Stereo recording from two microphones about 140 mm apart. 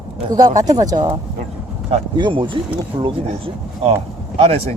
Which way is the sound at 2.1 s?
35° right (ahead or behind).